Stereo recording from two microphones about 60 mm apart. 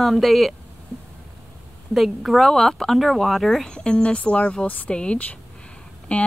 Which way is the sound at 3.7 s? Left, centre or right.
Centre.